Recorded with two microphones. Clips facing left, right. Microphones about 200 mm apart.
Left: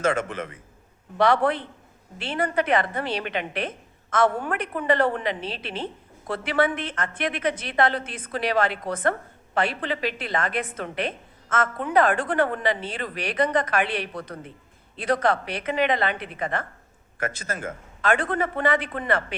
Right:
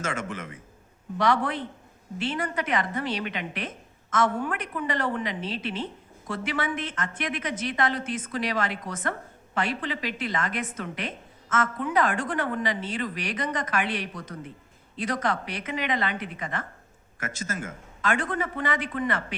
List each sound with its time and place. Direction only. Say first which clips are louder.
0.0 s a woman's voice: left 7 dB; 60° left (ahead or behind)